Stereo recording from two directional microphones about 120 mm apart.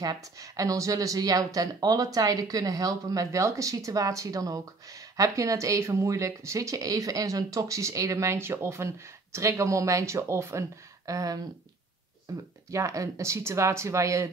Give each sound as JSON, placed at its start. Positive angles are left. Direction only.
{"t": 0.0, "sound": "speech", "side_deg": -30}